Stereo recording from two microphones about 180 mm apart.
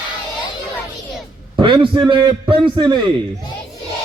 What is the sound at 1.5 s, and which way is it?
A man's voice, 25° right (ahead or behind).